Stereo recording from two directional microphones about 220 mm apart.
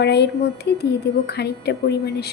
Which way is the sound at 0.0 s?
50° left (ahead or behind).